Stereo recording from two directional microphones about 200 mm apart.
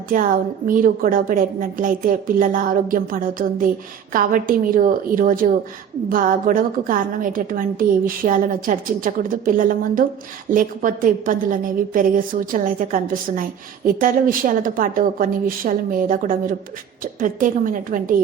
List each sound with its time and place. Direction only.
0.1 s a woman's voice: 45° right (ahead or behind)